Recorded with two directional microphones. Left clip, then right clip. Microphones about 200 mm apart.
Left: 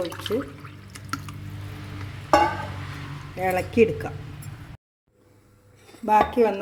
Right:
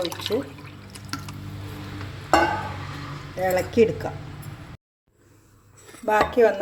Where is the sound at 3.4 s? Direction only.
15° left (ahead or behind).